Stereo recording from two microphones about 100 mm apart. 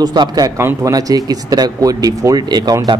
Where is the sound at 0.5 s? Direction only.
25° right (ahead or behind).